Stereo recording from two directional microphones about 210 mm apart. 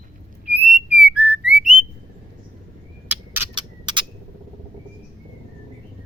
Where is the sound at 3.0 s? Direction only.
10° right (ahead or behind).